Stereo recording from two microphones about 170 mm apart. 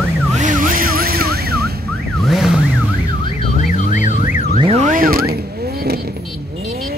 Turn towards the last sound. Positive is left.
turn(degrees=-60)  # may be behind; listen again after turning